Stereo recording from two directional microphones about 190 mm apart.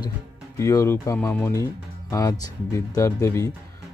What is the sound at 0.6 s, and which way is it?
Speech, 15° left (ahead or behind).